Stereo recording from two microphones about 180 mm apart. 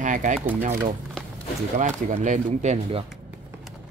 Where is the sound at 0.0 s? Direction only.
45° right (ahead or behind).